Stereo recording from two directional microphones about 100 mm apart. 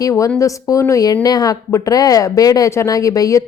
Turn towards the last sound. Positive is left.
turn(degrees=35)  # may be behind; listen again after turning